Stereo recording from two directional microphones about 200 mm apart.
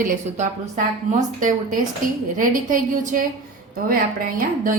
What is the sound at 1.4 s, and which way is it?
A woman's voice, 40° right (ahead or behind).